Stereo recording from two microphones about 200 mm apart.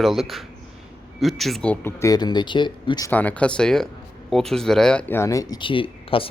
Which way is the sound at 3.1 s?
5° left (ahead or behind).